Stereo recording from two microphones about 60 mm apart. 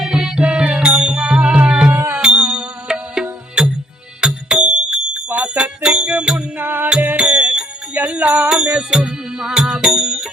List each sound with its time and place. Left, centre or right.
0.0 s music: centre
6.6 s music: right
7.2 s music: right